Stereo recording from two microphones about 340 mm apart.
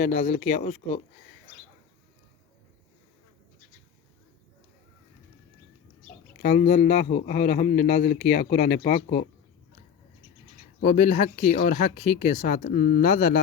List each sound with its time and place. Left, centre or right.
0.0 s a man's voice: centre
6.4 s a man's voice: left
10.8 s a man's voice: left